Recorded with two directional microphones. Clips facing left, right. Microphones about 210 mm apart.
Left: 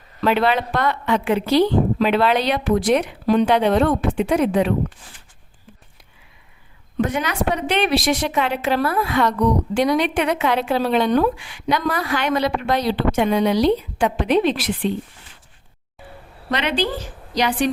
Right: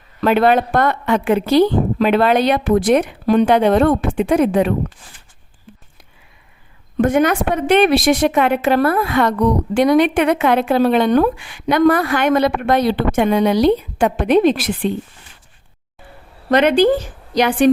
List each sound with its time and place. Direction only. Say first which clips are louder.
0.2 s a woman's voice: right 5 dB; 50° right (ahead or behind)
6.9 s a woman's voice: right 8 dB; 50° right (ahead or behind)
16.5 s a woman's voice: right 10 dB; 50° right (ahead or behind)